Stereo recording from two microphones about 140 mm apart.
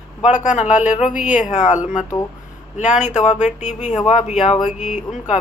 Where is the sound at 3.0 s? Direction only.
55° left (ahead or behind).